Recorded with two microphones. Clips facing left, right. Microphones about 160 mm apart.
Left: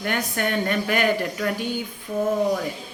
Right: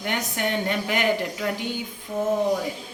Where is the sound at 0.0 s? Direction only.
20° right (ahead or behind).